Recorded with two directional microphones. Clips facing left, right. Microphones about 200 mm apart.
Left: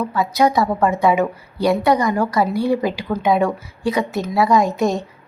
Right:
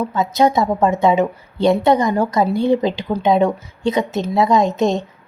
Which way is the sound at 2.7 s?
25° right (ahead or behind).